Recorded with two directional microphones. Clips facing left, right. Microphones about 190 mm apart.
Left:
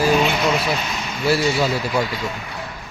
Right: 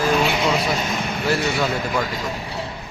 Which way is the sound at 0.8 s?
50° right (ahead or behind).